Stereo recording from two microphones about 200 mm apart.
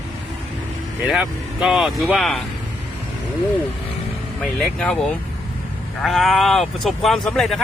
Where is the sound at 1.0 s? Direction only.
5° right (ahead or behind).